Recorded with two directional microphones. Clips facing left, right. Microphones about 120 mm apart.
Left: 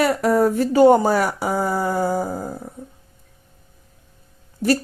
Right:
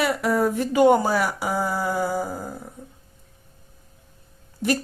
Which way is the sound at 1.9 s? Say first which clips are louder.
Left 4 dB; 45° left (ahead or behind).